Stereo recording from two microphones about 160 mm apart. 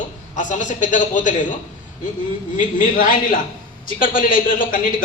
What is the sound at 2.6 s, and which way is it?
A man's voice, 55° left (ahead or behind).